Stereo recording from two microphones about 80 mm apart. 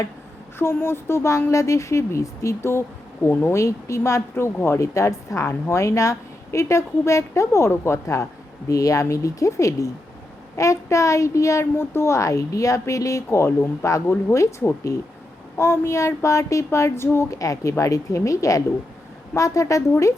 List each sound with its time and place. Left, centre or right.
0.6 s speech: left
17.4 s a woman's voice: left